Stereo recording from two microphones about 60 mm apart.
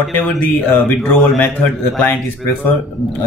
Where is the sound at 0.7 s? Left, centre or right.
Left.